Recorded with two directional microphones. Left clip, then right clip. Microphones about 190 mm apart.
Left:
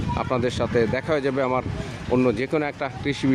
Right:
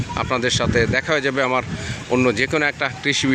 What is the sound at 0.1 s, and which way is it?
Speech, 5° left (ahead or behind).